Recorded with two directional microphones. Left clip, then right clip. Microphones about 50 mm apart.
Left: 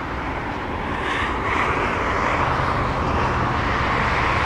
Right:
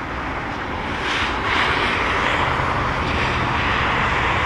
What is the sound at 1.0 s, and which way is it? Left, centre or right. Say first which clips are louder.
Vehicle: right 2 dB; right.